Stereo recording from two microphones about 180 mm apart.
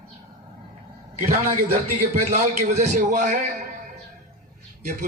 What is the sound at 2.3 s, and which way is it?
A man's voice, 50° right (ahead or behind).